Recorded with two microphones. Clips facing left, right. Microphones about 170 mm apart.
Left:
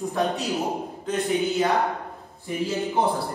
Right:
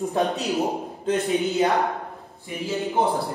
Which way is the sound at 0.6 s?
20° right (ahead or behind).